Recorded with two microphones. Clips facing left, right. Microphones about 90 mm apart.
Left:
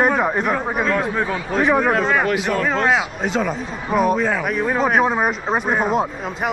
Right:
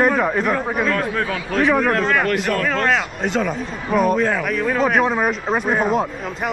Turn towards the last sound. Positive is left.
turn(degrees=0)  # may be behind; listen again after turning